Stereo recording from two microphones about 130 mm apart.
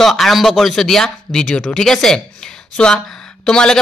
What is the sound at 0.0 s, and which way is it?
Speech, centre (ahead or behind).